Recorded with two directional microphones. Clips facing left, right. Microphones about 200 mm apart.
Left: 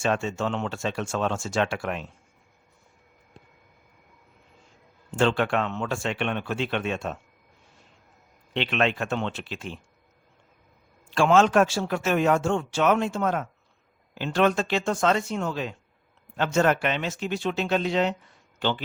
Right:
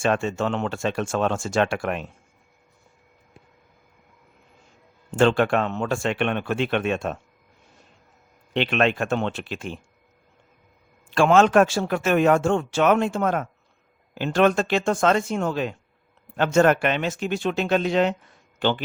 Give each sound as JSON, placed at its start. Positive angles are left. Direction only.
{"t": 0.0, "sound": "speech", "side_deg": -55}
{"t": 5.1, "sound": "speech", "side_deg": -50}
{"t": 8.5, "sound": "speech", "side_deg": -50}
{"t": 11.1, "sound": "speech", "side_deg": -55}